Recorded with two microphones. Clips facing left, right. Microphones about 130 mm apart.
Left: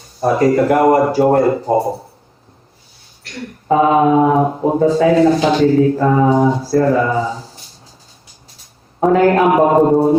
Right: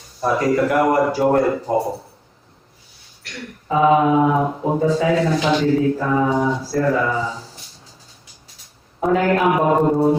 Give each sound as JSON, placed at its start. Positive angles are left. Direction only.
{"t": 0.2, "sound": "speech", "side_deg": 45}
{"t": 3.7, "sound": "speech", "side_deg": 45}
{"t": 9.0, "sound": "speech", "side_deg": 40}